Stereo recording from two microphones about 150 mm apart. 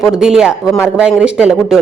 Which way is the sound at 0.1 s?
5° right (ahead or behind).